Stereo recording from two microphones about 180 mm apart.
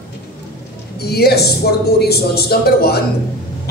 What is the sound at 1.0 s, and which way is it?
Speech, 60° left (ahead or behind).